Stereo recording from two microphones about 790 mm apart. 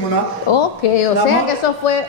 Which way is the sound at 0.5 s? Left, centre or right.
Left.